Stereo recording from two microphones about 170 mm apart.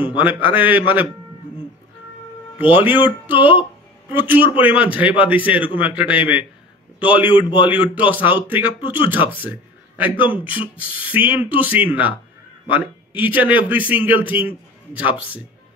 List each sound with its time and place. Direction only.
0.0 s speech: 10° right (ahead or behind)
2.8 s speech: 10° right (ahead or behind)
7.4 s a man's voice: 25° left (ahead or behind)
7.7 s speech: 10° right (ahead or behind)
9.4 s a sound: 10° right (ahead or behind)
10.2 s speech: 10° right (ahead or behind)